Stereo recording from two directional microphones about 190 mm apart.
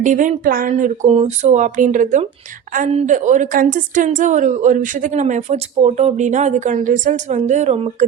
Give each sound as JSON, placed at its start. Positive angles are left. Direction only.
{"t": 0.0, "sound": "a woman's voice", "side_deg": -40}